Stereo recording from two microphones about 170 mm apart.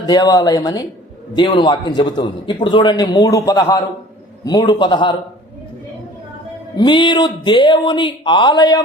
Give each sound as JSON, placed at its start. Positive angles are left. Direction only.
{"t": 0.0, "sound": "a man's voice", "side_deg": 20}
{"t": 6.7, "sound": "a man's voice", "side_deg": 25}